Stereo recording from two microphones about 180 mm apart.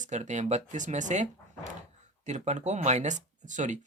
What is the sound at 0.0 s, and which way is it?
Speech, 40° right (ahead or behind).